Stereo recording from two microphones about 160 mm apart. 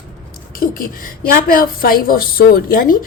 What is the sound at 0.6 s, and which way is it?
Speech, 60° left (ahead or behind).